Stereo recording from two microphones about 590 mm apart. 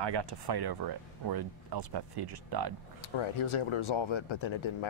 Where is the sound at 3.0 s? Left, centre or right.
Left.